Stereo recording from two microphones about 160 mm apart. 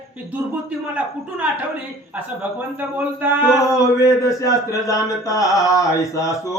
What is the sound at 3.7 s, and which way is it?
A man's voice, 20° left (ahead or behind).